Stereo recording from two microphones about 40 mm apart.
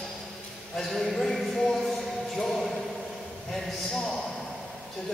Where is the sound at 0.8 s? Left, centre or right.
Centre.